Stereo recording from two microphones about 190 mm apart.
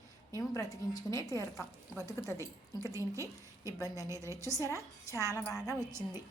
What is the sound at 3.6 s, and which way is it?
Speech, 20° left (ahead or behind).